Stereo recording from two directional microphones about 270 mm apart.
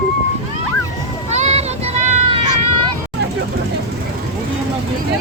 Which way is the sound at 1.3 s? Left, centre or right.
Right.